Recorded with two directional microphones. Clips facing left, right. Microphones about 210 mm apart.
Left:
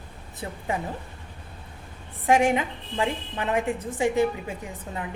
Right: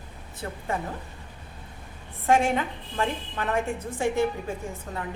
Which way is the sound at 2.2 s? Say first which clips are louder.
Left 2 dB; 15° left (ahead or behind).